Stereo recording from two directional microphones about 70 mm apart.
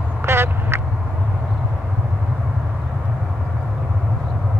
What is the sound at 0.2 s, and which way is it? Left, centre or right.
Quack, right.